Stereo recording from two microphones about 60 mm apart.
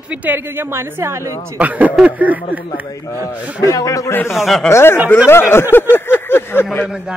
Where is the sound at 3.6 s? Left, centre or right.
Left.